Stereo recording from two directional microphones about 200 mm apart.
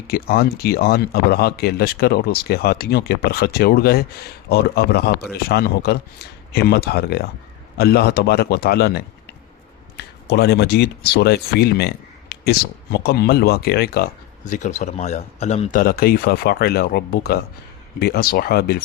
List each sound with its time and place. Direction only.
0.1 s speech: 50° left (ahead or behind); by 15.8 s 35° left (ahead or behind)
15.8 s speech: 50° left (ahead or behind)